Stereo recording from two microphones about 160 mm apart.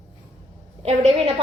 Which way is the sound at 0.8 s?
40° right (ahead or behind).